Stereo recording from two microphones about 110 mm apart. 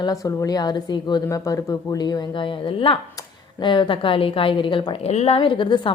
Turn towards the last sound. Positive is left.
turn(degrees=45)  # may be behind; listen again after turning